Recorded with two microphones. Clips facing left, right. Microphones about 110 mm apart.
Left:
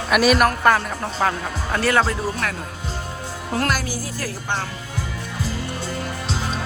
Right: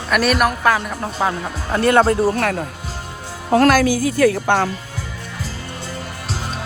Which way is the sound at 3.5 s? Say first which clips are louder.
Right 10 dB; 90° right.